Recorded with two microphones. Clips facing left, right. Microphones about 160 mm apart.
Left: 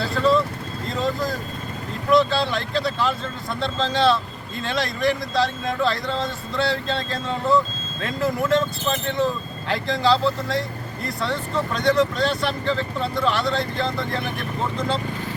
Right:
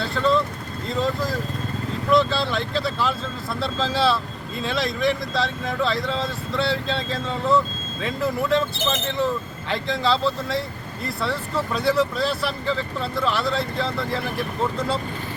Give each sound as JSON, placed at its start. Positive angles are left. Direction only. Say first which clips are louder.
{"t": 0.0, "sound": "speech", "louder": "left 2 dB", "side_deg": 0}
{"t": 8.8, "sound": "speech", "louder": "even", "side_deg": -90}
{"t": 9.0, "sound": "speech", "louder": "left 1 dB", "side_deg": 0}